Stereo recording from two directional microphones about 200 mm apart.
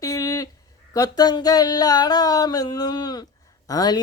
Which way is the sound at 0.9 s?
20° left (ahead or behind).